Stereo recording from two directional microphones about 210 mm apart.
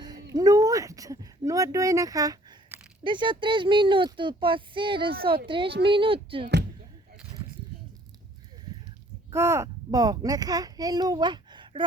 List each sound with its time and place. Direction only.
0.3 s a sound: 15° right (ahead or behind)
3.0 s speech: 20° right (ahead or behind)
9.3 s a child's voice: 15° right (ahead or behind)